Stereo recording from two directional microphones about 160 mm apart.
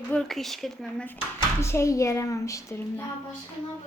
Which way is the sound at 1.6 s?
20° left (ahead or behind).